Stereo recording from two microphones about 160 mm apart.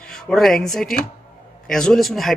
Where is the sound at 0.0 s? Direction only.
5° left (ahead or behind).